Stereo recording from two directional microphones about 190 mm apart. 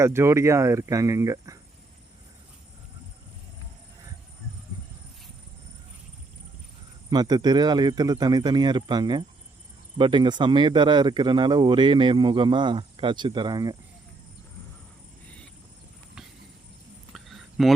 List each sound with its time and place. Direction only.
0.0 s speech: 15° right (ahead or behind)
7.1 s speech: 20° right (ahead or behind)
17.1 s a sound: centre (ahead or behind)